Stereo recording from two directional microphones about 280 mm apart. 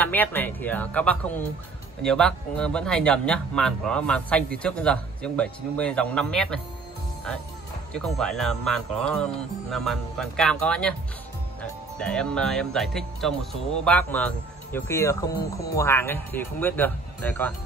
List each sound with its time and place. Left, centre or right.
0.0 s speech: centre
7.9 s speech: centre
12.0 s speech: centre